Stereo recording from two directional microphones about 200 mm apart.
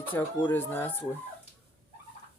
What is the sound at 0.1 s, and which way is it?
Speech, 10° left (ahead or behind).